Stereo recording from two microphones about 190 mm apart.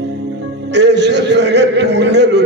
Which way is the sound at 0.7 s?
65° right (ahead or behind).